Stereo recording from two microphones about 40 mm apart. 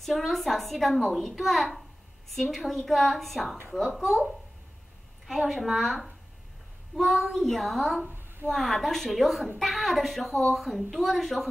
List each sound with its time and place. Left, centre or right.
0.0 s a child's voice: centre
5.2 s a child's voice: centre
5.9 s speech: centre
7.0 s a child's voice: centre